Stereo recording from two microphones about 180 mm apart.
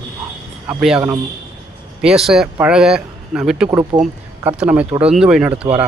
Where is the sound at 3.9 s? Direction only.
30° right (ahead or behind).